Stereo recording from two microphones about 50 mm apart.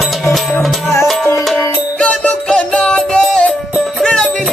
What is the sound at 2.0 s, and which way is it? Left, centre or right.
Music, left.